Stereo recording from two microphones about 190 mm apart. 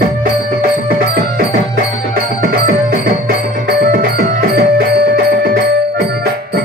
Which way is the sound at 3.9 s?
55° right (ahead or behind).